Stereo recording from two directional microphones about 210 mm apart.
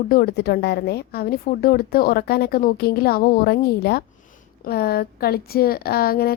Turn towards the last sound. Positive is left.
turn(degrees=45)  # may be behind; listen again after turning